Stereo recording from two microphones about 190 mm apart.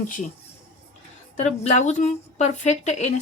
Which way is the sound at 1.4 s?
40° left (ahead or behind).